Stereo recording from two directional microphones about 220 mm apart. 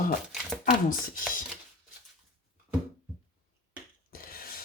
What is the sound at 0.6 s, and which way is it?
Speech, 40° left (ahead or behind).